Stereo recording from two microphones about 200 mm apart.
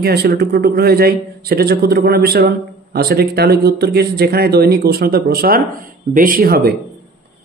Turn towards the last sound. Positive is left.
turn(degrees=-50)  # may be behind; listen again after turning